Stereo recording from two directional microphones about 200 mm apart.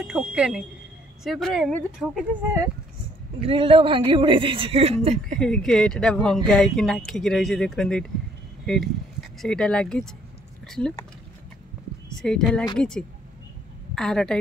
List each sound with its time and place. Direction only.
0.0 s speech: 5° right (ahead or behind)
3.4 s a man's voice: 30° right (ahead or behind)
5.4 s speech: 5° left (ahead or behind)
12.2 s speech: 5° left (ahead or behind)